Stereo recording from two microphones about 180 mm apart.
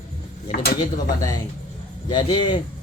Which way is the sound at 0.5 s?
55° left (ahead or behind).